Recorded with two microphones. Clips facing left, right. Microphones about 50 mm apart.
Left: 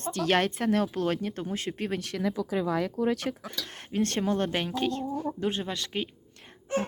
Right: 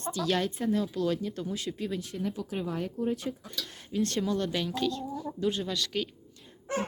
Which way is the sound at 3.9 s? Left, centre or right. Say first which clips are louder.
Left 2 dB; left.